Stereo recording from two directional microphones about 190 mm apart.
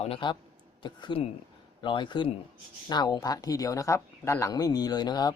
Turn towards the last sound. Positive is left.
turn(degrees=20)  # may be behind; listen again after turning